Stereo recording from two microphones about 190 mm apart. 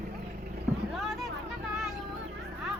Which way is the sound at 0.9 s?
Centre (ahead or behind).